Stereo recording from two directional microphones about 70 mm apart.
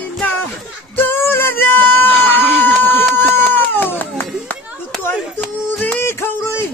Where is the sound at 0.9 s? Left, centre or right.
Left.